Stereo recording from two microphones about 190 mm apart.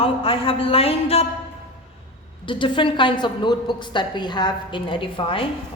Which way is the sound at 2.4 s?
25° left (ahead or behind).